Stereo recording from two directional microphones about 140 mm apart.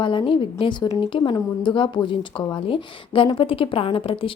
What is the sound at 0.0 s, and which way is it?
Speech, 35° left (ahead or behind).